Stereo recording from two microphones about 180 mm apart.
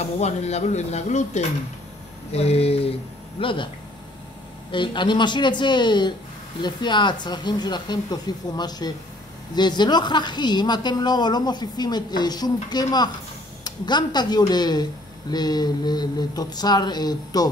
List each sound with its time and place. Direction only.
0.2 s speech: 35° left (ahead or behind); by 17.5 s 20° left (ahead or behind)